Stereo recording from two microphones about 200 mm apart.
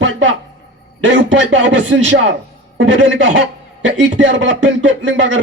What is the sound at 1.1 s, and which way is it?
Speech, 65° right (ahead or behind).